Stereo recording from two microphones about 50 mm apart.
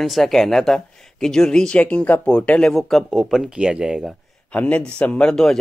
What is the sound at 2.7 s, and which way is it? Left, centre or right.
Speech, centre.